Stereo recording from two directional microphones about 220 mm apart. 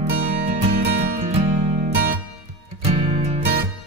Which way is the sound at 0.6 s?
40° right (ahead or behind).